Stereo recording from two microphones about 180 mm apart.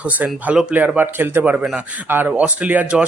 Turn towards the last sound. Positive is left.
turn(degrees=-10)  # may be behind; listen again after turning